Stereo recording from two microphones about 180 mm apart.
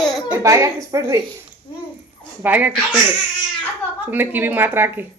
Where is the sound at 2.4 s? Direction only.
10° right (ahead or behind).